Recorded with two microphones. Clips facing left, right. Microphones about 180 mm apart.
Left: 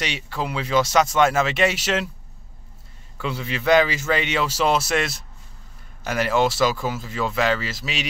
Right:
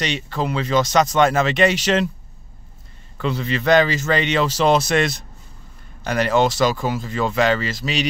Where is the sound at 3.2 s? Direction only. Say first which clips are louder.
Right 4 dB; 5° left (ahead or behind).